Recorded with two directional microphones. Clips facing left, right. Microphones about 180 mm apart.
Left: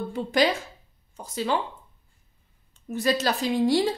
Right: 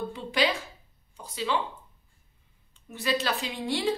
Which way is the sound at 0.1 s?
45° left (ahead or behind).